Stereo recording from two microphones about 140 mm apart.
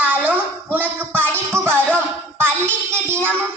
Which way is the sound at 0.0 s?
10° right (ahead or behind).